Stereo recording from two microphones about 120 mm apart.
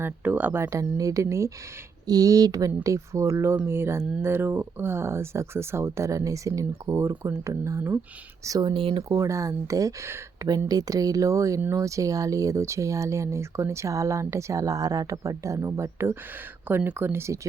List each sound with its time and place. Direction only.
0.0 s speech: 15° right (ahead or behind); by 8.7 s 30° right (ahead or behind)
8.7 s speech: 50° right (ahead or behind)
9.0 s speech: 25° right (ahead or behind)